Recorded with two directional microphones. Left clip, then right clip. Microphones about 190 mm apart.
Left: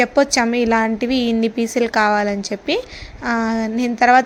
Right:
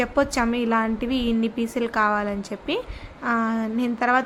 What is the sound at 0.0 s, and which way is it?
A woman's voice, 20° left (ahead or behind).